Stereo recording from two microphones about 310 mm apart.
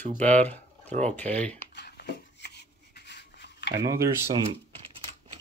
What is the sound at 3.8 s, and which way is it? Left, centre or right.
Speech, centre.